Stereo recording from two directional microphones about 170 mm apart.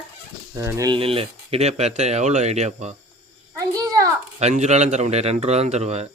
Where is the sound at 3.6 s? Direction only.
20° right (ahead or behind).